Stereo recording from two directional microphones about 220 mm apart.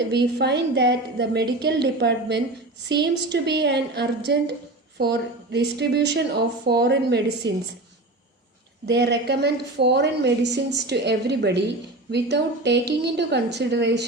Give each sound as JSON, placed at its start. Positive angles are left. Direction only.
{"t": 0.1, "sound": "a woman's voice", "side_deg": -50}
{"t": 8.9, "sound": "a woman's voice", "side_deg": -50}